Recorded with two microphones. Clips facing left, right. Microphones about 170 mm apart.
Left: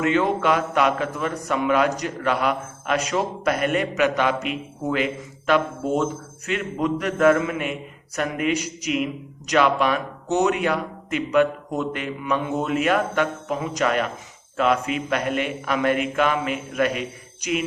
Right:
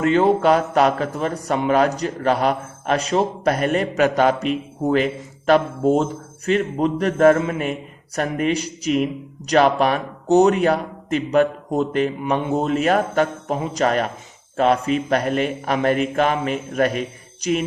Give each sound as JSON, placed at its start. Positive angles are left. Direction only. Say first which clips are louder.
{"t": 0.0, "sound": "a man's voice", "louder": "right 4 dB", "side_deg": -35}